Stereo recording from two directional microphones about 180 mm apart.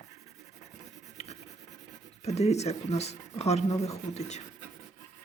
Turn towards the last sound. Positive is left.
turn(degrees=40)  # may be behind; listen again after turning